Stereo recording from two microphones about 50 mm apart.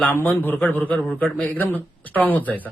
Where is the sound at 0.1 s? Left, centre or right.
Left.